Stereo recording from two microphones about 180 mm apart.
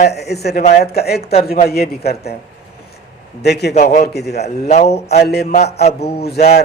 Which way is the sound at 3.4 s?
65° left (ahead or behind).